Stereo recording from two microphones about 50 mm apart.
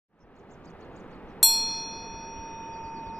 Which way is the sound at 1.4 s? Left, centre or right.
Centre.